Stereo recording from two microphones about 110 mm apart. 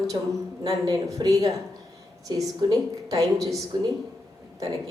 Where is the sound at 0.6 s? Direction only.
35° right (ahead or behind).